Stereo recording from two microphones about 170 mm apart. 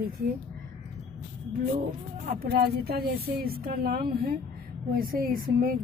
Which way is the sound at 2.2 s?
60° right (ahead or behind).